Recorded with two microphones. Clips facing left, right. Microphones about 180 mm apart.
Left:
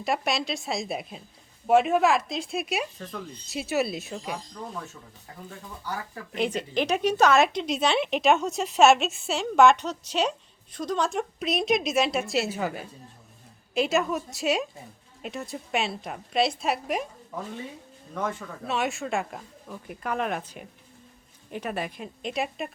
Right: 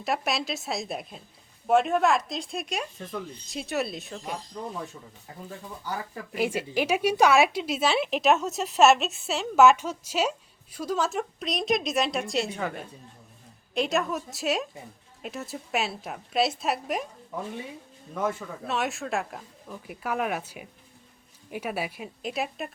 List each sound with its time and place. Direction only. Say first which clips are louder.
0.0 s a woman's voice: left 1 dB; centre (ahead or behind)
6.3 s a woman's voice: even; 5° right (ahead or behind)